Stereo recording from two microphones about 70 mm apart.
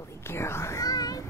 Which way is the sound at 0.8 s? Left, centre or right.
Left.